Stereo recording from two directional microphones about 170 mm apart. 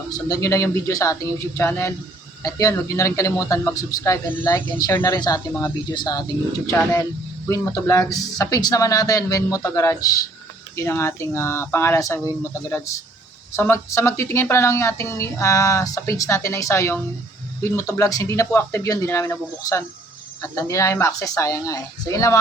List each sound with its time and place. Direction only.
0.1 s speech: 20° left (ahead or behind)